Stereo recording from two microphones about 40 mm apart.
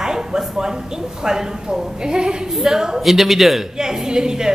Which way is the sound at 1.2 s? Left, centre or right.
Centre.